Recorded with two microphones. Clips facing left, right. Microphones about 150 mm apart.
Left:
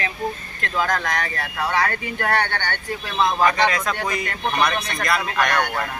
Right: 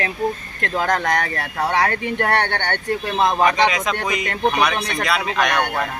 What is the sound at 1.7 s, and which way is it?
Speech, 65° right (ahead or behind).